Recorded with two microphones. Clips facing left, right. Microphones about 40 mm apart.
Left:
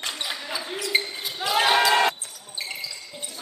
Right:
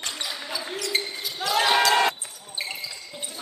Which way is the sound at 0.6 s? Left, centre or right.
Centre.